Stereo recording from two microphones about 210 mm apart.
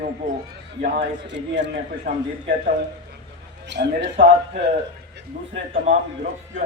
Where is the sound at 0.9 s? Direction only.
60° right (ahead or behind).